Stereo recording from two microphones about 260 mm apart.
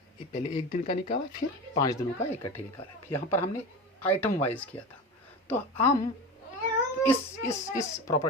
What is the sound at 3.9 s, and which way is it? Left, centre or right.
Speech, centre.